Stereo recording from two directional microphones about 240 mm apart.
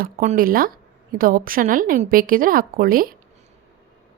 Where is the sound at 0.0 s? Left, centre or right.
Right.